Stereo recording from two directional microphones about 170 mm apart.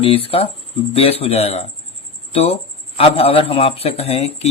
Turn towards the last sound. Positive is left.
turn(degrees=35)  # may be behind; listen again after turning